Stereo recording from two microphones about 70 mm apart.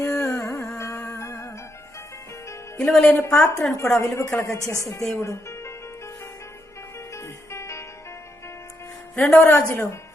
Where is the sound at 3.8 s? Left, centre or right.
Left.